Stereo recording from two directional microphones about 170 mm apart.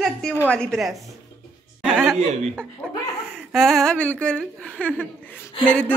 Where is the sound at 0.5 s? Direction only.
5° left (ahead or behind).